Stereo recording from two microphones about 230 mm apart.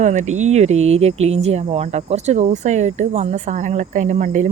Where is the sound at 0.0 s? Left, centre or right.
Right.